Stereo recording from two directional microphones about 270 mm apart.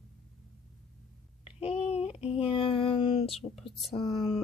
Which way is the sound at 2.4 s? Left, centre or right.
Centre.